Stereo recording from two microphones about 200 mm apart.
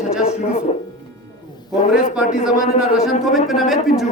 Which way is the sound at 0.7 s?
35° left (ahead or behind).